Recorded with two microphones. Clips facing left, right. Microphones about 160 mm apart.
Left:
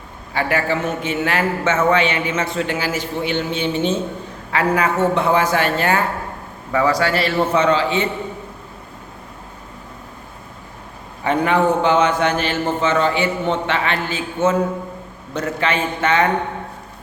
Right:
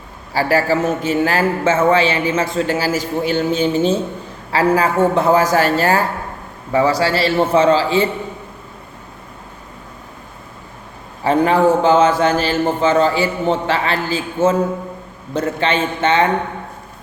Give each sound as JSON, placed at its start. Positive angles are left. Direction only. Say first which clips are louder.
{"t": 0.3, "sound": "a man's voice", "louder": "right 4 dB", "side_deg": -35}
{"t": 11.2, "sound": "a man's voice", "louder": "right 3 dB", "side_deg": -35}